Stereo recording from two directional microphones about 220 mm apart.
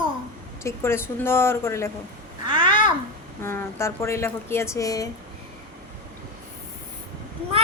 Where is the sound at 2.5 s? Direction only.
20° right (ahead or behind).